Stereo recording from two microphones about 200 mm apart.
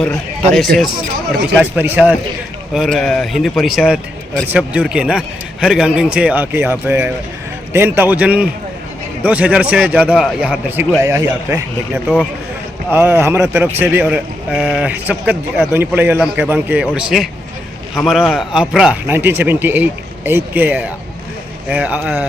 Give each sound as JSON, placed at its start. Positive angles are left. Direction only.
{"t": 0.0, "sound": "a man's voice", "side_deg": 5}
{"t": 2.7, "sound": "a man's voice", "side_deg": 0}
{"t": 12.0, "sound": "speech", "side_deg": 5}
{"t": 12.9, "sound": "a man's voice", "side_deg": -10}